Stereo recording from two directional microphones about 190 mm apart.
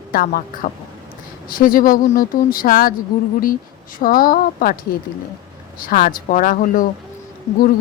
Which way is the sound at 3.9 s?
50° left (ahead or behind).